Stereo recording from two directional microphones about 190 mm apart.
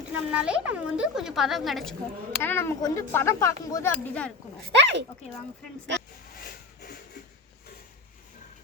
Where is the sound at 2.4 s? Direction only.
10° left (ahead or behind).